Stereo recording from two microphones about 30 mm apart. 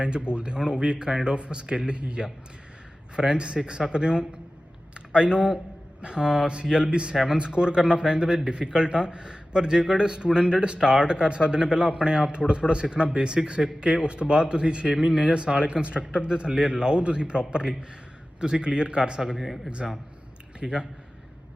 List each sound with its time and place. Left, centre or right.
0.0 s a man's voice: right
19.4 s speech: centre
20.6 s speech: right